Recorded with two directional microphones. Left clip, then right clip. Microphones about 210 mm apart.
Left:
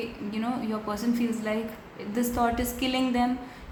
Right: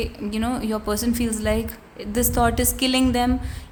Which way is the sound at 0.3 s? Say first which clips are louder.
Right 6 dB; 50° right (ahead or behind).